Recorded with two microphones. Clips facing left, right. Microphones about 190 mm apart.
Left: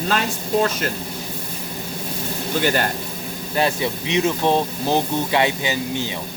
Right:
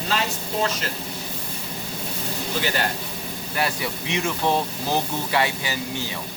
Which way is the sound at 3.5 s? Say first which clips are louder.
Left 6 dB; 25° left (ahead or behind).